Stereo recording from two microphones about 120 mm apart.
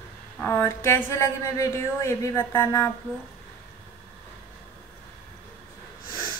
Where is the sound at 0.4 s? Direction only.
15° left (ahead or behind).